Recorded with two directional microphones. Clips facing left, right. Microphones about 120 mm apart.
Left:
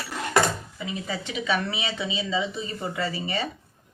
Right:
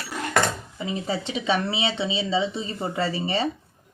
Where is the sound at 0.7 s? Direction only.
30° right (ahead or behind).